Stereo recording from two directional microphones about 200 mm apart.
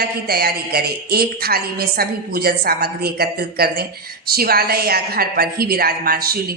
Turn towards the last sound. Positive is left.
turn(degrees=-50)  # may be behind; listen again after turning